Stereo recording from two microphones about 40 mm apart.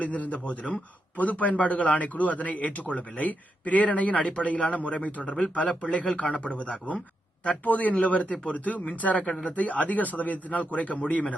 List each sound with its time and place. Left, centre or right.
0.0 s a man's voice: left